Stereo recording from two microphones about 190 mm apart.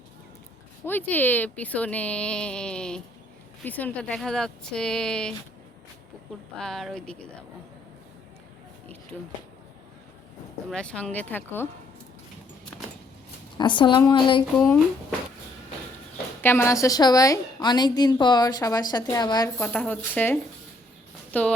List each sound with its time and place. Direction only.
0.9 s speech: 10° left (ahead or behind)
6.6 s speech: centre (ahead or behind)
10.7 s speech: 5° left (ahead or behind)
13.6 s a woman's voice: 25° left (ahead or behind)
16.4 s a woman's voice: 10° left (ahead or behind)
19.5 s speech: 5° left (ahead or behind)